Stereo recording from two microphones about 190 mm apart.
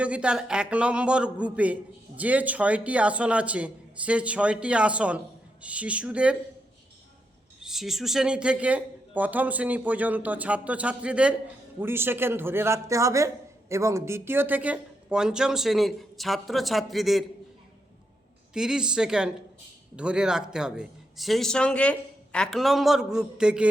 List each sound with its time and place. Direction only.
0.0 s a man's voice: 5° right (ahead or behind)
7.6 s a man's voice: centre (ahead or behind)
18.5 s a man's voice: 5° right (ahead or behind)